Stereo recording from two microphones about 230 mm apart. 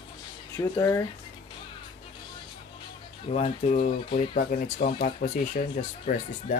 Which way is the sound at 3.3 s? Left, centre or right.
Left.